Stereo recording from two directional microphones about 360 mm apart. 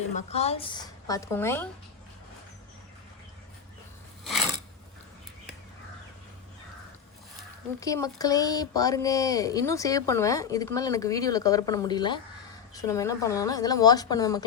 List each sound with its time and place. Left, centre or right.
0.1 s speech: centre
4.2 s mechanisms: centre
7.8 s speech: centre